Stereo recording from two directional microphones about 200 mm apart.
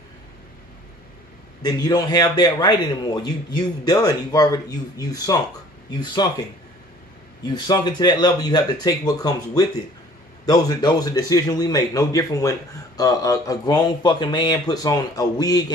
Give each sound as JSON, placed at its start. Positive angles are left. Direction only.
{"t": 1.6, "sound": "a man's voice", "side_deg": 20}
{"t": 7.4, "sound": "a man's voice", "side_deg": 20}